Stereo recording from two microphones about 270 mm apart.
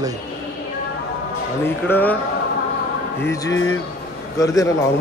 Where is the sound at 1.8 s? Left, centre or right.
Centre.